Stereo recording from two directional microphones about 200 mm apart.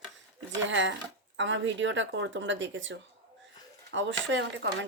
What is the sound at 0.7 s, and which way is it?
Speech, 70° right (ahead or behind).